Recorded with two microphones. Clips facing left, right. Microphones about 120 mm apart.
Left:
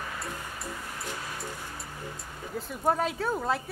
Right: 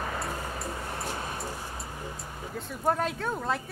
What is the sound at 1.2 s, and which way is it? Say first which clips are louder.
Music: right 3 dB; 25° right (ahead or behind).